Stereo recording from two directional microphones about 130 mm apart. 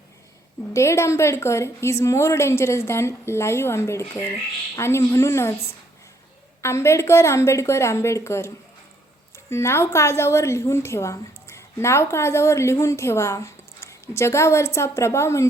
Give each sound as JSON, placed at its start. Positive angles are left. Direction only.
{"t": 0.7, "sound": "a woman's voice", "side_deg": 20}
{"t": 6.6, "sound": "a woman's voice", "side_deg": 20}